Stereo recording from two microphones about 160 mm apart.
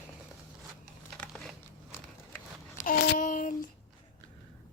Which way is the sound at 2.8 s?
55° left (ahead or behind).